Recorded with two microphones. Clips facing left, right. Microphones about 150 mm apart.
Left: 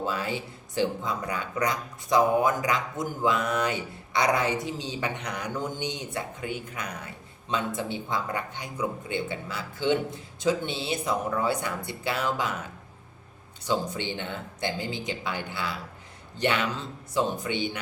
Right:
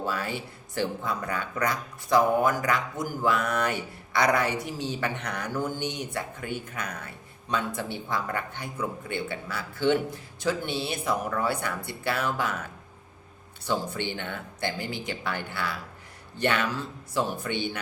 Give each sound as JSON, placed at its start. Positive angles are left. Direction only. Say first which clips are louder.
{"t": 0.0, "sound": "speech", "louder": "left 1 dB", "side_deg": 20}
{"t": 13.7, "sound": "speech", "louder": "left 1 dB", "side_deg": 20}